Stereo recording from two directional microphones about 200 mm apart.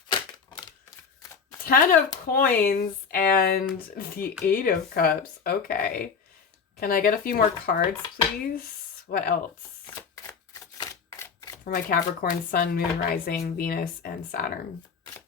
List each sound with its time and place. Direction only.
0.1 s a sound: 20° left (ahead or behind)
1.6 s speech: 45° left (ahead or behind)
10.5 s camera: 20° left (ahead or behind)
11.6 s speech: 45° left (ahead or behind)